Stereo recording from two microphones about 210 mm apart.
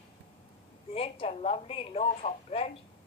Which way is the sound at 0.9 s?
25° left (ahead or behind).